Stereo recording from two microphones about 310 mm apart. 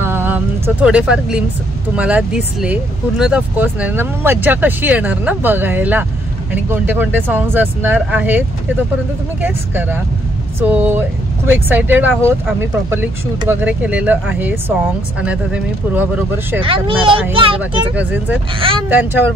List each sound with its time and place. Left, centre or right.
0.0 s vehicle: centre
2.0 s speech: centre
16.6 s speech: centre
17.9 s speech: centre
18.6 s speech: centre
18.9 s speech: centre